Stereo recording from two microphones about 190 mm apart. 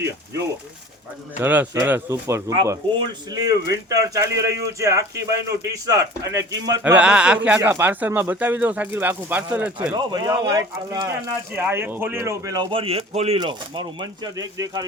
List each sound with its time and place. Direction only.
1.4 s speech: 10° right (ahead or behind)
6.8 s speech: 5° right (ahead or behind)